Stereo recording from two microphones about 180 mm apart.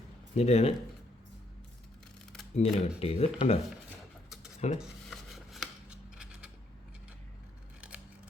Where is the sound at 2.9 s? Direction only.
35° left (ahead or behind).